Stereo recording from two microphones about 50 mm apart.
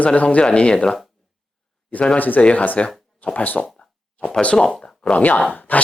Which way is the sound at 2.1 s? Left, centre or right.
Left.